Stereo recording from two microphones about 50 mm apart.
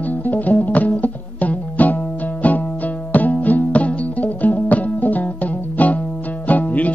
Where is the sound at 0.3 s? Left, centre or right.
Left.